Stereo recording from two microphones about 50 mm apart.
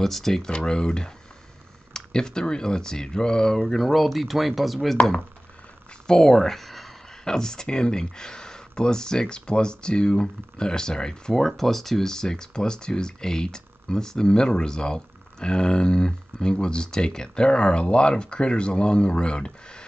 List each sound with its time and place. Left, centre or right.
0.0 s speech: centre
6.0 s speech: centre
7.2 s speech: centre